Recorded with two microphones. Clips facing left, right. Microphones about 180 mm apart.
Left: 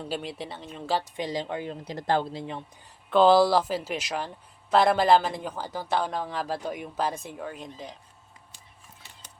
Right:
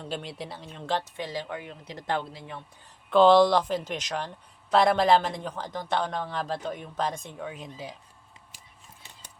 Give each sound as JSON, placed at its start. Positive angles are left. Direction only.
{"t": 0.0, "sound": "speech", "side_deg": 5}
{"t": 1.1, "sound": "speech", "side_deg": 15}
{"t": 3.1, "sound": "speech", "side_deg": 5}